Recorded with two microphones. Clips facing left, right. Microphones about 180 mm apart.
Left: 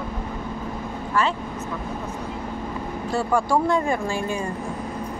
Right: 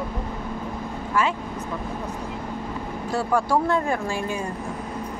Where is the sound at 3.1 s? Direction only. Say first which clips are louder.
Left 1 dB; 5° right (ahead or behind).